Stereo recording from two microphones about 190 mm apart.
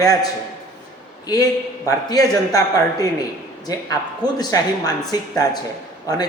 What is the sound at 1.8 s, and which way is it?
Speech, 20° left (ahead or behind).